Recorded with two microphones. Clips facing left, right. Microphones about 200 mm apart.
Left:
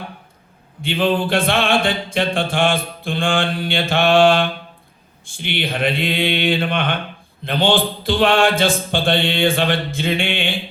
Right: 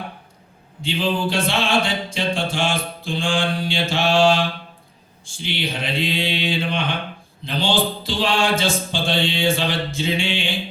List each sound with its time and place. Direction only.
0.8 s music: 55° left (ahead or behind)